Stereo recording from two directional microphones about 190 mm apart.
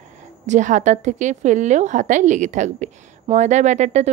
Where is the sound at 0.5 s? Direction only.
40° right (ahead or behind).